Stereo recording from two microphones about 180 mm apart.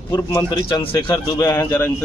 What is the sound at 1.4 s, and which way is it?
Speech, 15° left (ahead or behind).